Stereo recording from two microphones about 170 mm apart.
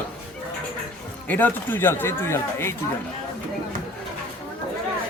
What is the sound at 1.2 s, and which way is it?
Speech, 10° left (ahead or behind).